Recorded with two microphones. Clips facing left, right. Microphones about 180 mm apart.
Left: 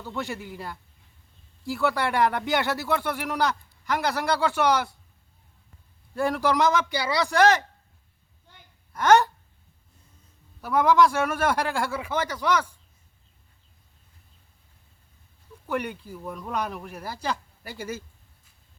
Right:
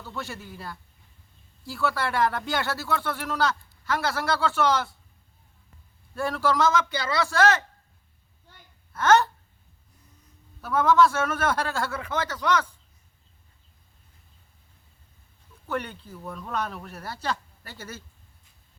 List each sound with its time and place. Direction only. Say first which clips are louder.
0.0 s speech: left 4 dB; 15° left (ahead or behind)
6.1 s speech: left 2 dB; 15° left (ahead or behind)
8.9 s gasp: left 1 dB; 15° left (ahead or behind)
10.6 s speech: left 1 dB; 15° left (ahead or behind)
15.6 s speech: left 2 dB; 10° left (ahead or behind)